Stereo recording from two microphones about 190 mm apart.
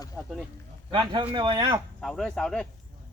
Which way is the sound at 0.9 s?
25° right (ahead or behind).